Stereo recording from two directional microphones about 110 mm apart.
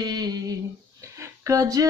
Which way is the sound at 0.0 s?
40° right (ahead or behind).